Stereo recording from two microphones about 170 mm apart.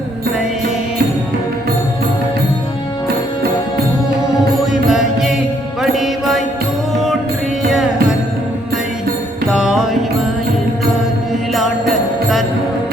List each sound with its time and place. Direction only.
4.7 s mantra: centre (ahead or behind)
5.8 s music: centre (ahead or behind)
9.5 s mantra: centre (ahead or behind)